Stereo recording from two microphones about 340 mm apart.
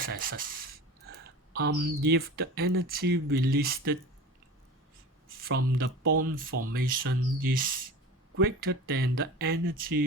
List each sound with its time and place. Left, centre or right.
0.0 s a sound: right
1.5 s speech: right
5.4 s speech: right
5.7 s speech: right